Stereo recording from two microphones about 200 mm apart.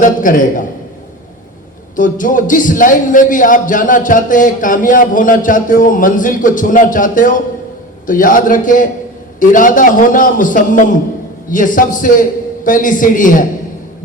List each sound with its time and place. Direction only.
0.0 s a man's voice: 40° left (ahead or behind)
2.0 s a man's voice: 40° left (ahead or behind)